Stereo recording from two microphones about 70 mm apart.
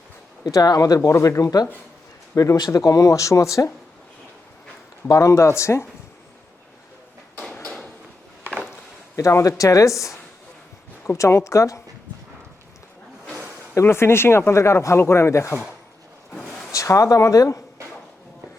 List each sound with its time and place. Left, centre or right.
0.4 s speech: left
0.9 s speech: left
1.4 s speech: left
5.1 s speech: left
9.4 s speech: left
13.7 s speech: left
16.7 s speech: left